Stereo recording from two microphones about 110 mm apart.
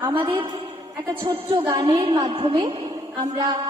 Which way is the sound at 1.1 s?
55° right (ahead or behind).